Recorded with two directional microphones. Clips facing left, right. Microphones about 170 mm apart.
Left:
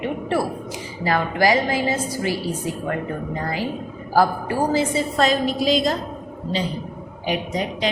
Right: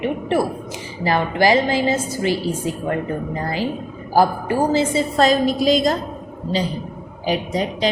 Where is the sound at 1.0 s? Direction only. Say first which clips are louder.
Right 2 dB; 25° right (ahead or behind).